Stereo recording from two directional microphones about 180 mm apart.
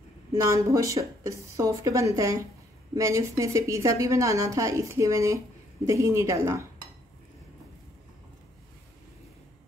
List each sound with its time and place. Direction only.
0.3 s a woman's voice: 15° right (ahead or behind)